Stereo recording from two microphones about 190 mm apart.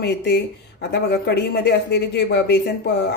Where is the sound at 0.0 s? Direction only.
60° left (ahead or behind).